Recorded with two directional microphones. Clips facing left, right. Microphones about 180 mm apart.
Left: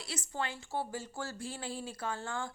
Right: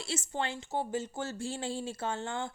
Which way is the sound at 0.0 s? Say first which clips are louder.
Right 4 dB; 25° right (ahead or behind).